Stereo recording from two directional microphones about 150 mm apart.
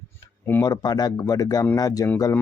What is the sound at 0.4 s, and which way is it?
Speech, 20° left (ahead or behind).